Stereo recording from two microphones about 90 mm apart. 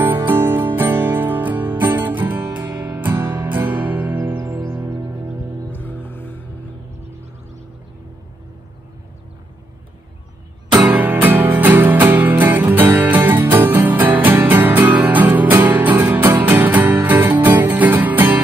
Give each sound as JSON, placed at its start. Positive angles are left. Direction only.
{"t": 0.3, "sound": "music", "side_deg": -25}
{"t": 5.8, "sound": "music", "side_deg": 20}
{"t": 10.8, "sound": "music", "side_deg": -15}